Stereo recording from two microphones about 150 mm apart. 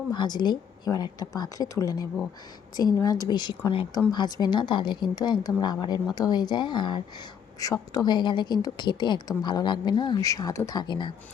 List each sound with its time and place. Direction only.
0.1 s a woman's voice: 30° left (ahead or behind)